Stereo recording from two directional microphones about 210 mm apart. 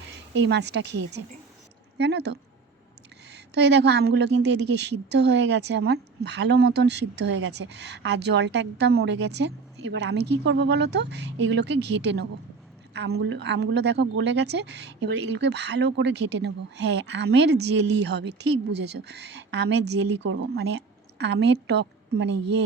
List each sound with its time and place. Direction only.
0.4 s a woman's voice: 55° right (ahead or behind)
12.9 s a woman's voice: 50° right (ahead or behind)